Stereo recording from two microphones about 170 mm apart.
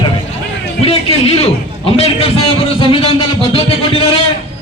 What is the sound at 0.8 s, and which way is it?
A man's voice, 35° left (ahead or behind).